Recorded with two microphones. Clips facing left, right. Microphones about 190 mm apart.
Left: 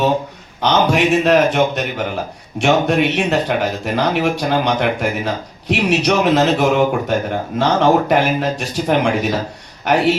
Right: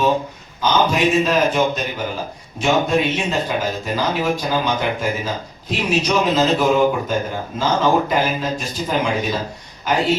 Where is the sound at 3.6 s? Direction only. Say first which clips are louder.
Left 3 dB; 65° left (ahead or behind).